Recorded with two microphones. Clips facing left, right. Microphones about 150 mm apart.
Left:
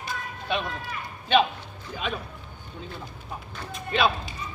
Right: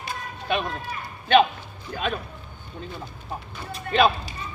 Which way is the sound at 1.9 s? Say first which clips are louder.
Right 4 dB; 55° right (ahead or behind).